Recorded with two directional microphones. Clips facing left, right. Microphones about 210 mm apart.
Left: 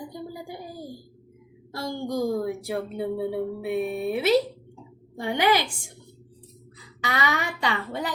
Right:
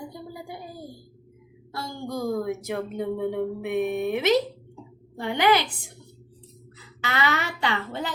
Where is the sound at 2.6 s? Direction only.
35° left (ahead or behind).